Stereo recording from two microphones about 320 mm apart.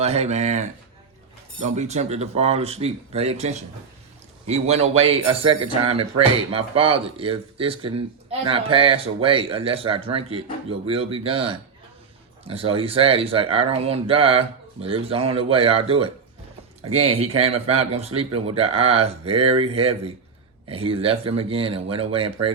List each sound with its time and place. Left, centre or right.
0.0 s speech: centre
17.2 s speech: centre